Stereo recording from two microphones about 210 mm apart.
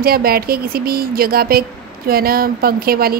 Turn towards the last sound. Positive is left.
turn(degrees=-45)  # may be behind; listen again after turning